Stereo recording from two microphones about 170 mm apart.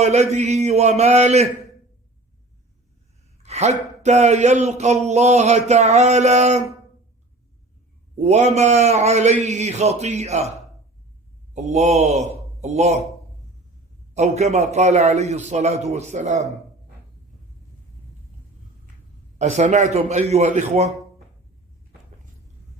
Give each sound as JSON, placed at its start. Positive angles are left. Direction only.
{"t": 0.0, "sound": "speech", "side_deg": -40}
{"t": 3.4, "sound": "speech", "side_deg": -40}
{"t": 8.2, "sound": "speech", "side_deg": -40}
{"t": 11.5, "sound": "a man's voice", "side_deg": -40}
{"t": 14.1, "sound": "speech", "side_deg": -40}
{"t": 19.4, "sound": "speech", "side_deg": -45}